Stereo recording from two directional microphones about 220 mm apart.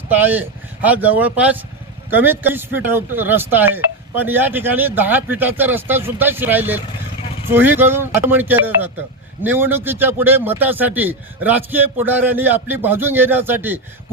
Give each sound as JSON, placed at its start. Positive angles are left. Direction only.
{"t": 0.1, "sound": "a man's voice", "side_deg": -10}